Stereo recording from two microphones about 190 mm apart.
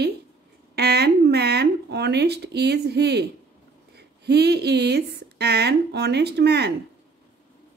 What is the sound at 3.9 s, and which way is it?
Speech, 60° right (ahead or behind).